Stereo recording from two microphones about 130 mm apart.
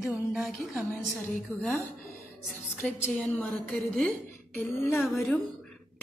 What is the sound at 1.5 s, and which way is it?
Speech, 10° left (ahead or behind).